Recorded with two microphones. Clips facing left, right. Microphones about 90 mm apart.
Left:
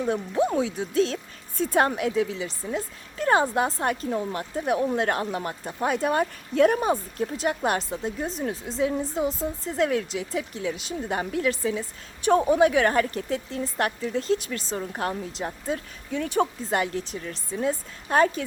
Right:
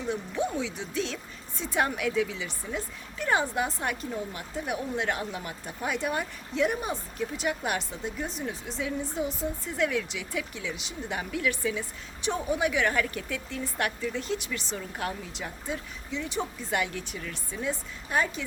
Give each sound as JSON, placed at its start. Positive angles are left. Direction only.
{"t": 0.0, "sound": "speech", "side_deg": 45}
{"t": 4.6, "sound": "speech", "side_deg": 40}
{"t": 12.2, "sound": "speech", "side_deg": 50}
{"t": 16.6, "sound": "speech", "side_deg": 35}